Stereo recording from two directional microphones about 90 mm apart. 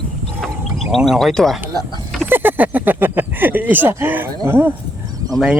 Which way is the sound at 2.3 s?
20° right (ahead or behind).